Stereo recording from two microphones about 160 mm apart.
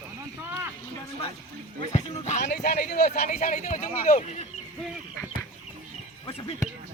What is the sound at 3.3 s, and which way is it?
Speech, 55° left (ahead or behind).